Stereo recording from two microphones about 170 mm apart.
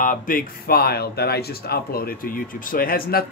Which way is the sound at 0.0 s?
55° left (ahead or behind).